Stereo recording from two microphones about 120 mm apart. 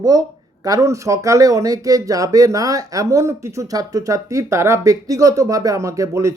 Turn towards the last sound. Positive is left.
turn(degrees=-25)  # may be behind; listen again after turning